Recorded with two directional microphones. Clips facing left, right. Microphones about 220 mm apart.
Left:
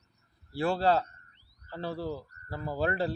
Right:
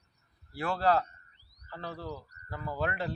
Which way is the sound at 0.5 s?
30° left (ahead or behind).